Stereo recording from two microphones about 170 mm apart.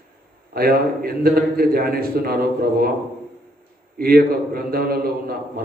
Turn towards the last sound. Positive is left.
turn(degrees=-60)  # may be behind; listen again after turning